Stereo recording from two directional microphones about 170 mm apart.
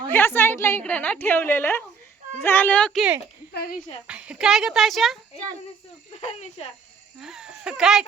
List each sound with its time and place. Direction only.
0.1 s a woman's voice: 15° left (ahead or behind)
3.5 s speech: 65° left (ahead or behind)
4.0 s a child's voice: 5° right (ahead or behind)
6.1 s speech: 40° left (ahead or behind)
7.2 s speech: 5° right (ahead or behind)